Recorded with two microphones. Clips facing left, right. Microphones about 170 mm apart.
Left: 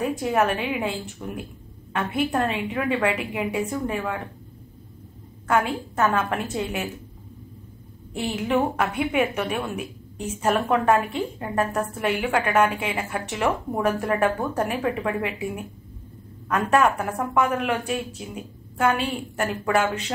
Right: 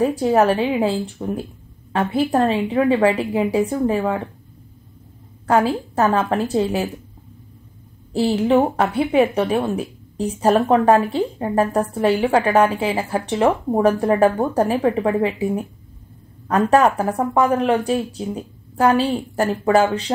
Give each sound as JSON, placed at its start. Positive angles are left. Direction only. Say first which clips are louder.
{"t": 0.0, "sound": "a woman's voice", "louder": "right 6 dB", "side_deg": -35}
{"t": 5.5, "sound": "a woman's voice", "louder": "right 5 dB", "side_deg": -35}
{"t": 8.1, "sound": "a woman's voice", "louder": "right 8 dB", "side_deg": -35}